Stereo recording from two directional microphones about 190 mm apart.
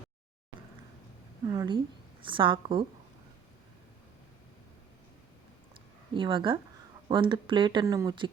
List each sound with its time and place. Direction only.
1.5 s speech: 20° right (ahead or behind)
6.1 s speech: 25° right (ahead or behind)